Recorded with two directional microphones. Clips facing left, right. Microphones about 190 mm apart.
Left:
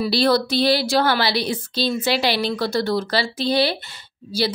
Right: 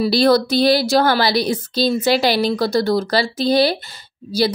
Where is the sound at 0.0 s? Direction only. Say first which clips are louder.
Right 4 dB; 45° right (ahead or behind).